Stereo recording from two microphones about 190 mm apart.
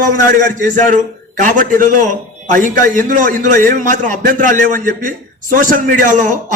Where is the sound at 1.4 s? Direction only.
45° right (ahead or behind).